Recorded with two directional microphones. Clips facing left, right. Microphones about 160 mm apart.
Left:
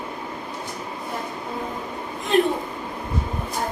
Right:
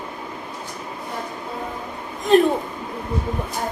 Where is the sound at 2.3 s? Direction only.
40° right (ahead or behind).